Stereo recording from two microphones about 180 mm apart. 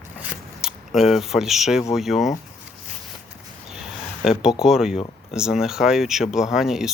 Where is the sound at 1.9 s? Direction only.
Centre (ahead or behind).